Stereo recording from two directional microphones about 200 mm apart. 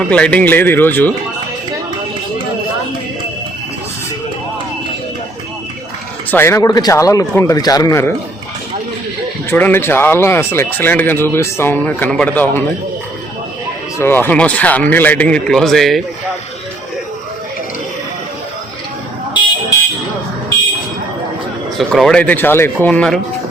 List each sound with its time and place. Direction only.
0.1 s speech: 5° left (ahead or behind)
6.3 s speech: 10° left (ahead or behind)
9.5 s speech: 10° left (ahead or behind)
14.0 s speech: 10° left (ahead or behind)
21.8 s speech: centre (ahead or behind)